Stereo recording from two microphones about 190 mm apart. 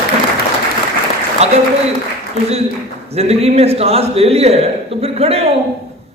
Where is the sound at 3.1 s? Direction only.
35° right (ahead or behind).